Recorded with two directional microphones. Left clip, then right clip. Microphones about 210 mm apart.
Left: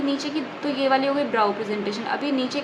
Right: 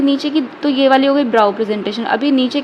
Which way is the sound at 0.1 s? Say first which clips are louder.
Right 9 dB; 35° right (ahead or behind).